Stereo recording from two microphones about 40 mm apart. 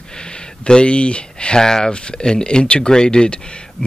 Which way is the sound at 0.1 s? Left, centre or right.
Left.